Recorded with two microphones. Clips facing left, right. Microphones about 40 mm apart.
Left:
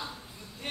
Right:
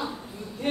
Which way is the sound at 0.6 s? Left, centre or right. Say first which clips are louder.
Right 11 dB; centre.